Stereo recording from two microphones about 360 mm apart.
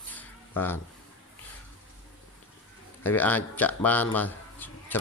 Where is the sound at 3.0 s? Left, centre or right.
Centre.